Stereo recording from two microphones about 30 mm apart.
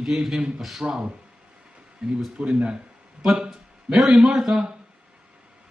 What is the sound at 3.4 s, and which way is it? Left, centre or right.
A man's voice, centre.